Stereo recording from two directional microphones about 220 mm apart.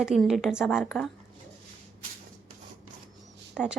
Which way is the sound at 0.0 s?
Centre (ahead or behind).